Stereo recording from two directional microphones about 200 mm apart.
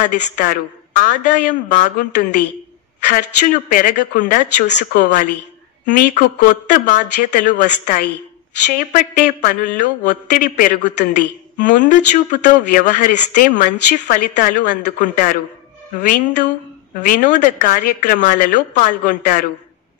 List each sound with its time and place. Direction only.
0.1 s speech: 40° left (ahead or behind)
4.6 s speech: 60° left (ahead or behind)
5.0 s speech: 40° left (ahead or behind)